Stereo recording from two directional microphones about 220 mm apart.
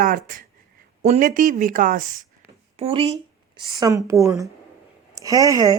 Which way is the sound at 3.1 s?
15° right (ahead or behind).